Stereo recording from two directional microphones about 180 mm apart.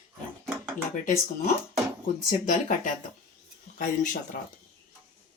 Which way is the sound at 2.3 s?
45° left (ahead or behind).